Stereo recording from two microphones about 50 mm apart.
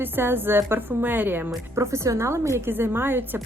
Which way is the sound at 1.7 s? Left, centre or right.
Right.